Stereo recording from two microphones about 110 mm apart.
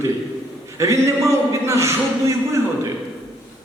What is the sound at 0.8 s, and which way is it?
Speech, 25° right (ahead or behind).